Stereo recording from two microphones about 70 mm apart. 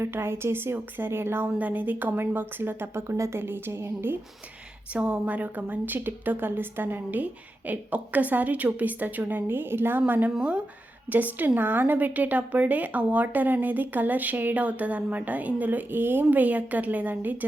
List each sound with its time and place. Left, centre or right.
0.0 s a woman's voice: right
1.5 s a woman's voice: right
4.9 s a woman's voice: right